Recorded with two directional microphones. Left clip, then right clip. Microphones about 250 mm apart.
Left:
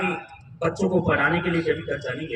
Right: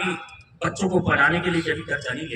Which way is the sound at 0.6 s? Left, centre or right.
Centre.